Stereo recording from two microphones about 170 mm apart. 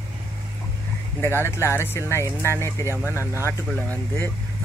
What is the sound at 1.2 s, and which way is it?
Speech, 15° left (ahead or behind).